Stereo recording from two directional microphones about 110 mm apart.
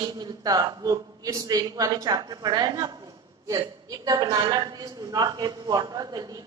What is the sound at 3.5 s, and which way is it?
A woman's voice, 30° right (ahead or behind).